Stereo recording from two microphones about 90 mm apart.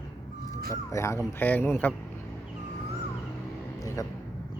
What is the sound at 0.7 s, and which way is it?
Speech, 35° left (ahead or behind).